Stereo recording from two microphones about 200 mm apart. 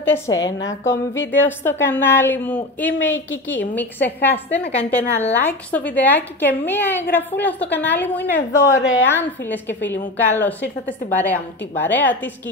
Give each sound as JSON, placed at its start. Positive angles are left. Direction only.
{"t": 0.6, "sound": "speech", "side_deg": 70}
{"t": 1.4, "sound": "a woman's voice", "side_deg": 10}
{"t": 8.8, "sound": "speech", "side_deg": 70}
{"t": 9.1, "sound": "a woman's voice", "side_deg": 10}